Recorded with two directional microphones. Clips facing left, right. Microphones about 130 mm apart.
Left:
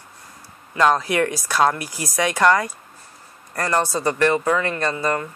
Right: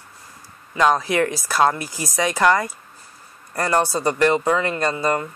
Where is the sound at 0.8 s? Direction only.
15° right (ahead or behind).